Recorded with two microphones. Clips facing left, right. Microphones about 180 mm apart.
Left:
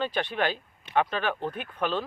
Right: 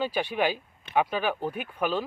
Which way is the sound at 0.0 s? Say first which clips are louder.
Right 1 dB; 10° right (ahead or behind).